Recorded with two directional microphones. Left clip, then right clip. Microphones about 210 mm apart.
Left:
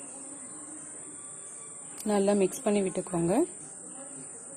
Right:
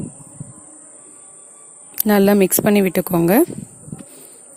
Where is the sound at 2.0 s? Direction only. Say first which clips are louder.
Right 11 dB; 50° right (ahead or behind).